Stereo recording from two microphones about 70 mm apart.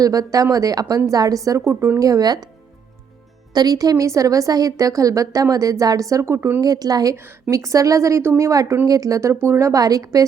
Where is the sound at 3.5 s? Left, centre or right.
Right.